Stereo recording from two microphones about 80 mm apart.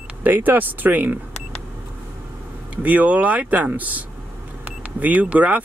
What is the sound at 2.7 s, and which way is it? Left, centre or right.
Speech, centre.